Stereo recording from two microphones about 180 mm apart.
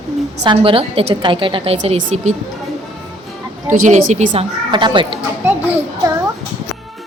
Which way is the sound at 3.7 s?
45° right (ahead or behind).